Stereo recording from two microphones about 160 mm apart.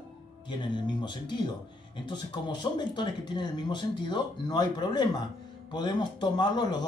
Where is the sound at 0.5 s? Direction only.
30° left (ahead or behind).